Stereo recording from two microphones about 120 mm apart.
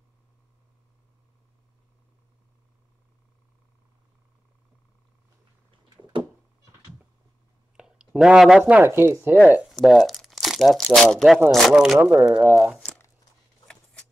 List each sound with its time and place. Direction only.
5.9 s a sound: 35° right (ahead or behind)
7.7 s speech: 5° right (ahead or behind)
9.7 s speech: centre (ahead or behind)
12.0 s speech: 10° right (ahead or behind)
12.7 s crumpling: 10° left (ahead or behind)